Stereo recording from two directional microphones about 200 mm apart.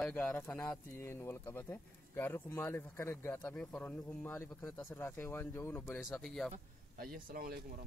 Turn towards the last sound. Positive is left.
turn(degrees=-45)  # may be behind; listen again after turning